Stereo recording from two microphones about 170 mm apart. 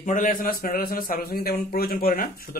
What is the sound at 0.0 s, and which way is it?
A man's voice, 50° left (ahead or behind).